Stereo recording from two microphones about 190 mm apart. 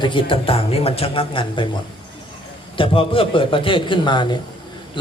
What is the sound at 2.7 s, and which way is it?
A man's voice, 25° left (ahead or behind).